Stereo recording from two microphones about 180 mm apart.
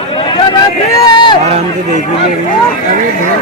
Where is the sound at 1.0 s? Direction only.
25° left (ahead or behind).